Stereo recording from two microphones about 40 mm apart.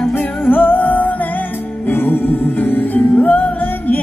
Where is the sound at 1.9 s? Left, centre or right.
Left.